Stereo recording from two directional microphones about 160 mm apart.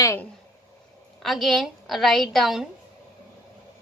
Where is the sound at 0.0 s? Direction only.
20° left (ahead or behind).